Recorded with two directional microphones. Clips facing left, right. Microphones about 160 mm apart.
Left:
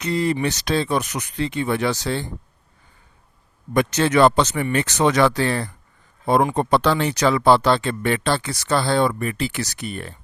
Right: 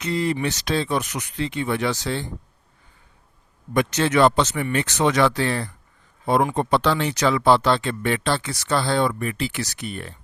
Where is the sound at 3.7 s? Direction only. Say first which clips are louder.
Left 2 dB; 40° left (ahead or behind).